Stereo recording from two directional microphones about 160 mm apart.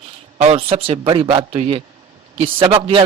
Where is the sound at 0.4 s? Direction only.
35° right (ahead or behind).